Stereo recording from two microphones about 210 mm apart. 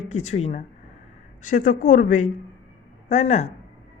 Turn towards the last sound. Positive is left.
turn(degrees=30)  # may be behind; listen again after turning